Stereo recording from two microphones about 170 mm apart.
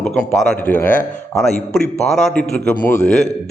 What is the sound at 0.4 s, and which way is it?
Speech, 10° left (ahead or behind).